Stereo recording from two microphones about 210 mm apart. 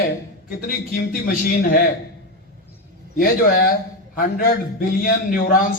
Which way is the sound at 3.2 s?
40° left (ahead or behind).